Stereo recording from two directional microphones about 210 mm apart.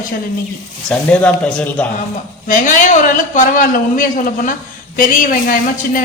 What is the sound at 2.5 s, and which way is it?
A man's voice, 35° left (ahead or behind).